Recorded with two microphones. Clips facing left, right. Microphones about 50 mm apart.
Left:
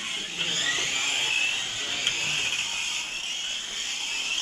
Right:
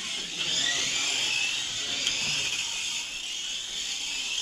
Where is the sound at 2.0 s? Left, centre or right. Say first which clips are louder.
Left 3 dB; left.